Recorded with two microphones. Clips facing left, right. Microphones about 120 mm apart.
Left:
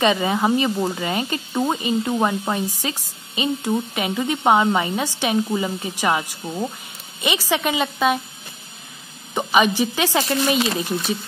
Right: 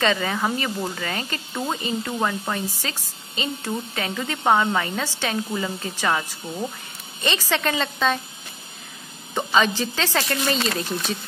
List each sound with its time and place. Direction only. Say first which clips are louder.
0.0 s speech: left 4 dB; 20° left (ahead or behind)
9.3 s speech: left 3 dB; 15° left (ahead or behind)